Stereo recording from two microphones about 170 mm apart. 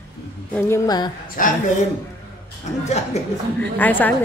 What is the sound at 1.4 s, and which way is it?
Speech, 55° left (ahead or behind).